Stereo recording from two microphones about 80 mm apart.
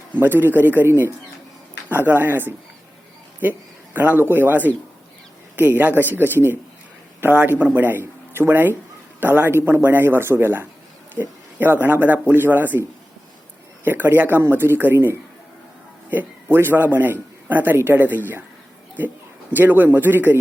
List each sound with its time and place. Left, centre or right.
0.2 s speech: right
13.8 s a man's voice: right
19.5 s speech: right